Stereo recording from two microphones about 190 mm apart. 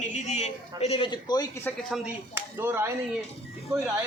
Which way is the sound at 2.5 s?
10° right (ahead or behind).